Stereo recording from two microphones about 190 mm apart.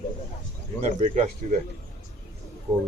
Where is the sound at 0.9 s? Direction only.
35° right (ahead or behind).